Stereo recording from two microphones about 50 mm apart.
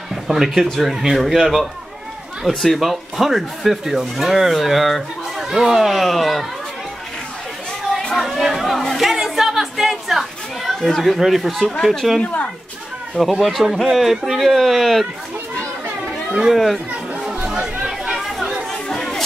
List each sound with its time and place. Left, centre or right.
0.1 s a man's voice: centre
8.2 s chatter: centre
10.8 s speech: centre
16.3 s speech: centre
17.2 s chatter: centre
18.7 s chatter: centre